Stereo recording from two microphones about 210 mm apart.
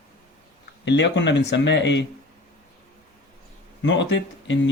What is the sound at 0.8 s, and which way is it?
Speech, 55° left (ahead or behind).